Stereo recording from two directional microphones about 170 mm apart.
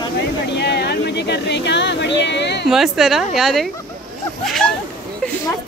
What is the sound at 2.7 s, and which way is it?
Speech, centre (ahead or behind).